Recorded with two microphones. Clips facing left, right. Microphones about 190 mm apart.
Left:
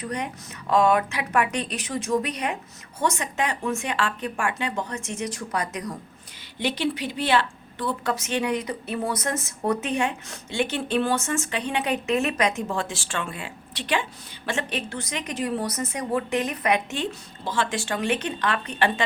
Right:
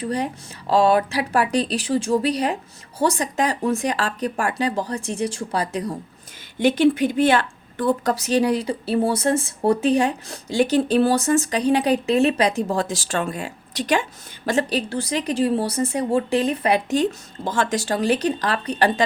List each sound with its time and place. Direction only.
0.0 s a woman's voice: 30° right (ahead or behind)
6.6 s a woman's voice: 50° right (ahead or behind)